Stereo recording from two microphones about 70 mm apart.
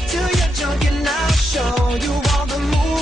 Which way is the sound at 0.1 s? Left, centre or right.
Centre.